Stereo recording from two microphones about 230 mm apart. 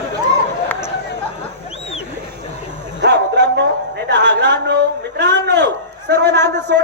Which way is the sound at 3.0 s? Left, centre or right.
Right.